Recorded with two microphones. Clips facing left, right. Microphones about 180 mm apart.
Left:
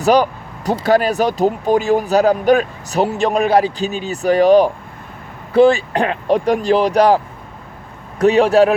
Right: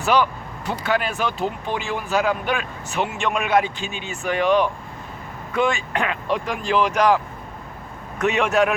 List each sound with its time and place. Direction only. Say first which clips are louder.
0.0 s speech: left 6 dB; 40° left (ahead or behind)
8.2 s speech: left 8 dB; 35° left (ahead or behind)